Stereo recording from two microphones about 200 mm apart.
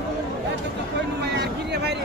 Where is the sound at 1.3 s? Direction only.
55° right (ahead or behind).